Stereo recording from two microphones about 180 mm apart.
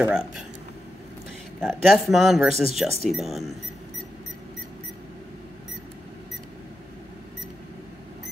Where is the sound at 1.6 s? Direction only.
Centre (ahead or behind).